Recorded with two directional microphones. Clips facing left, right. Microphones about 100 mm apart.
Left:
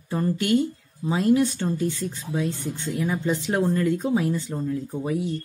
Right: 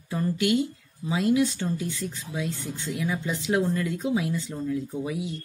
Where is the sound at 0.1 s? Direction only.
40° left (ahead or behind).